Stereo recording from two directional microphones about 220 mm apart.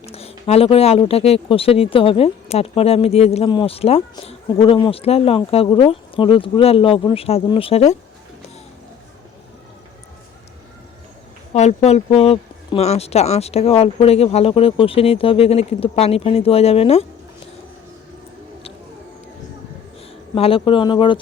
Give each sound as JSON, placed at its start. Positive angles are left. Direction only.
{"t": 0.1, "sound": "speech", "side_deg": 25}
{"t": 11.5, "sound": "speech", "side_deg": 30}
{"t": 20.3, "sound": "speech", "side_deg": 25}